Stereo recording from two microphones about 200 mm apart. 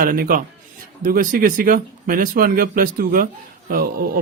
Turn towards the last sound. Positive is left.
turn(degrees=-45)  # may be behind; listen again after turning